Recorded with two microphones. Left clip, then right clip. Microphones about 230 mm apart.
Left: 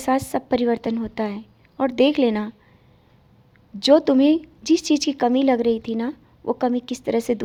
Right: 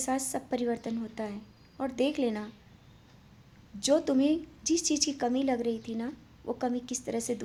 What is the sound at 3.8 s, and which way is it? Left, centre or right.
Speech, left.